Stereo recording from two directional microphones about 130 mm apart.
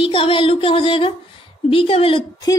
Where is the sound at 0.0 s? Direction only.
40° left (ahead or behind).